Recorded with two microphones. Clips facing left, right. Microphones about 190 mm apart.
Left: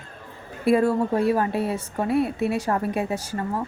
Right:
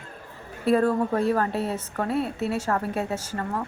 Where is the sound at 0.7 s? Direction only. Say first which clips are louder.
Left 2 dB; 10° left (ahead or behind).